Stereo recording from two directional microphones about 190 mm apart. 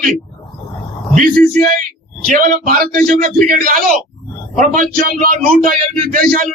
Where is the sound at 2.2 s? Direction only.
45° right (ahead or behind).